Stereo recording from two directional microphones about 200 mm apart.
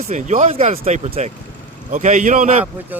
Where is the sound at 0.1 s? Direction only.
35° right (ahead or behind).